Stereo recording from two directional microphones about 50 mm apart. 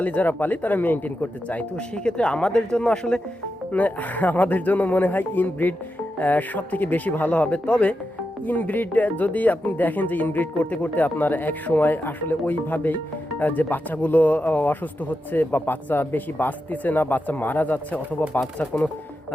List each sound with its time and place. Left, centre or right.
0.0 s speech: left
1.7 s speech: centre
3.7 s speech: left